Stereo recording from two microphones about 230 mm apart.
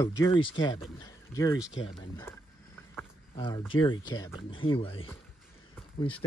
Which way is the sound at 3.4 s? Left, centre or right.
Centre.